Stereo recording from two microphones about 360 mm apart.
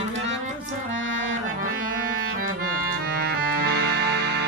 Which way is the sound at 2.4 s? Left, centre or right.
Right.